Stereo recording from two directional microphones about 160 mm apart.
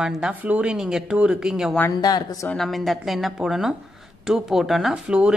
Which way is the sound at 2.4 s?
Centre (ahead or behind).